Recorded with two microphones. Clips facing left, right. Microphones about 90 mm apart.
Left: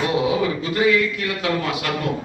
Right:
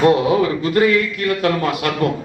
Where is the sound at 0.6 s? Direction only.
50° right (ahead or behind).